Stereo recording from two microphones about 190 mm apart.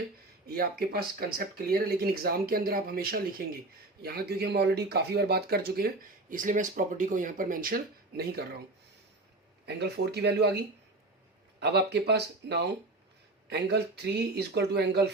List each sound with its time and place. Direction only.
0.4 s speech: 55° right (ahead or behind)
9.6 s speech: 60° right (ahead or behind)
11.6 s speech: 60° right (ahead or behind)